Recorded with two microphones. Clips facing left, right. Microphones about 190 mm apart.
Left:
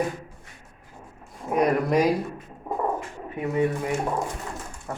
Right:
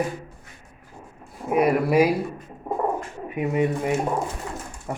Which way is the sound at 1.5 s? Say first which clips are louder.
Right 2 dB; 5° right (ahead or behind).